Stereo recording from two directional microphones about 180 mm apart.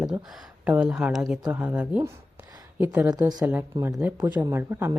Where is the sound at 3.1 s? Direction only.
20° right (ahead or behind).